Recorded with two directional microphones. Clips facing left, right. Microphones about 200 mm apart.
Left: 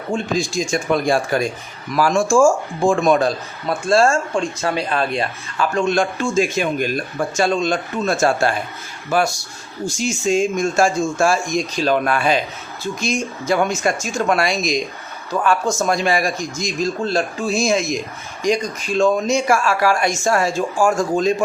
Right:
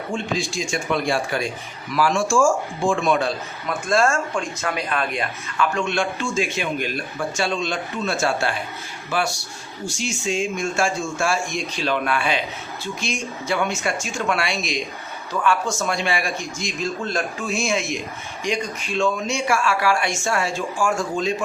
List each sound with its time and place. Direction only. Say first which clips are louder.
0.1 s speech: left 5 dB; 40° left (ahead or behind)